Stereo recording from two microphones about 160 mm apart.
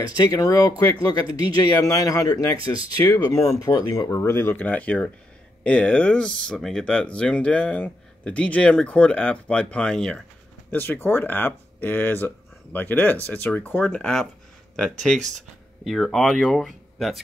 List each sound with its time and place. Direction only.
0.2 s speech: 25° left (ahead or behind); by 14.2 s 5° left (ahead or behind)
15.2 s speech: centre (ahead or behind)